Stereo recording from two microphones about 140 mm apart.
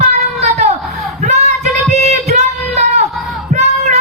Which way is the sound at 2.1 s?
60° right (ahead or behind).